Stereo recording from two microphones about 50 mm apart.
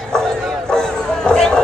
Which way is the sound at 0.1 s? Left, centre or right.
Centre.